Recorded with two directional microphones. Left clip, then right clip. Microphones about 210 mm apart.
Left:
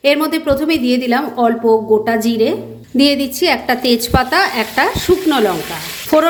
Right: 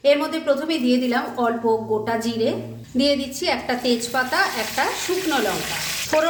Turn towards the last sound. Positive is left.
turn(degrees=40)  # may be behind; listen again after turning